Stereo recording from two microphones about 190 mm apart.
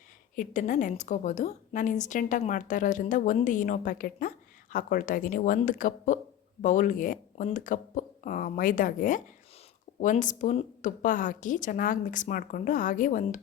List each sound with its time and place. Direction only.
0.3 s a woman's voice: 45° left (ahead or behind)